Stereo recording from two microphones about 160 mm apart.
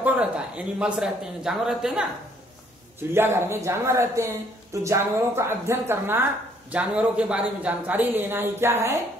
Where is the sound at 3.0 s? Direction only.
15° right (ahead or behind).